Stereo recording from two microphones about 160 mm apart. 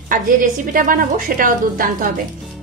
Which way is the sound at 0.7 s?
60° right (ahead or behind).